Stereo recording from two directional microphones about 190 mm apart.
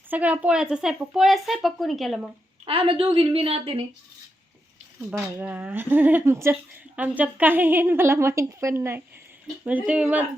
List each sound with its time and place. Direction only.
0.1 s speech: 10° right (ahead or behind)
2.6 s a woman's voice: 30° right (ahead or behind)
5.4 s a woman's voice: 10° right (ahead or behind)